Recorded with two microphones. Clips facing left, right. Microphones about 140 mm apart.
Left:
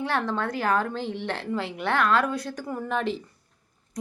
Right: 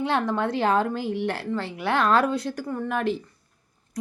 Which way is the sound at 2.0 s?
35° right (ahead or behind).